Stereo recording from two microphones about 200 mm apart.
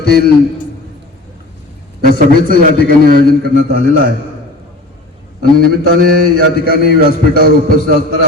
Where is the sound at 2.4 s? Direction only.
45° right (ahead or behind).